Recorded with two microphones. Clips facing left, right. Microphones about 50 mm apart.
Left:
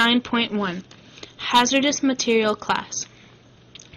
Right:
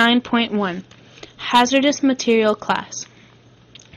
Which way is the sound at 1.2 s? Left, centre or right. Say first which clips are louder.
Right 2 dB; right.